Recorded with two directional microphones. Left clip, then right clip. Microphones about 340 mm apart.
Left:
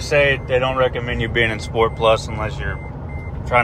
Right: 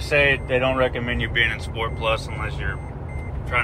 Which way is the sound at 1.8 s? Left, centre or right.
Centre.